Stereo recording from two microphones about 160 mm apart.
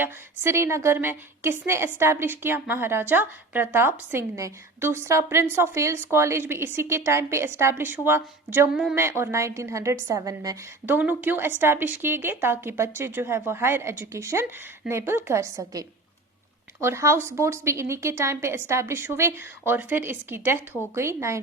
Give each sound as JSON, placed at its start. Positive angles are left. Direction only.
{"t": 0.0, "sound": "a woman's voice", "side_deg": -15}